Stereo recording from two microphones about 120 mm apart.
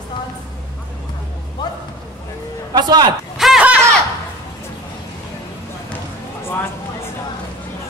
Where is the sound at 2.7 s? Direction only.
35° right (ahead or behind).